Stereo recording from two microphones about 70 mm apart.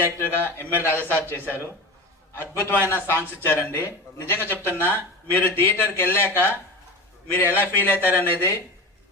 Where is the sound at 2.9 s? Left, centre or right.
Left.